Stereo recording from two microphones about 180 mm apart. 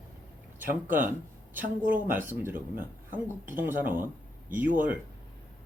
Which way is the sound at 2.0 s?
10° right (ahead or behind).